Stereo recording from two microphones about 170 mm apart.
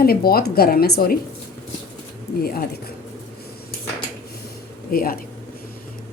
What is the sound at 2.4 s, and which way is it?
Speech, 60° left (ahead or behind).